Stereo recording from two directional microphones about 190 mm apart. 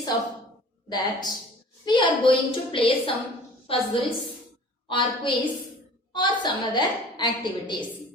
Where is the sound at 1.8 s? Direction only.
25° left (ahead or behind).